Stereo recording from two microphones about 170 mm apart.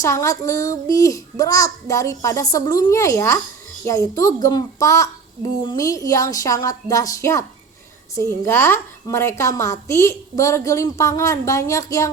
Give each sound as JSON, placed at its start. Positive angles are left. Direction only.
{"t": 0.0, "sound": "a child's voice", "side_deg": 20}